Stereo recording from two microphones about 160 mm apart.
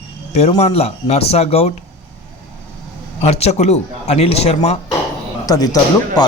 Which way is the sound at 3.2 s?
40° left (ahead or behind).